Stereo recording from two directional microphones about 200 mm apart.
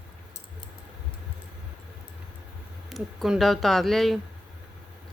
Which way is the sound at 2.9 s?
Centre (ahead or behind).